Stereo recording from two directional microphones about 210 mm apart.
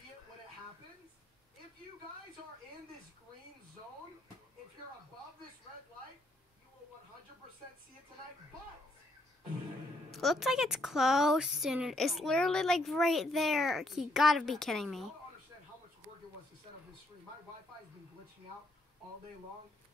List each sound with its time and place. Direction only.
10.1 s a child's voice: centre (ahead or behind)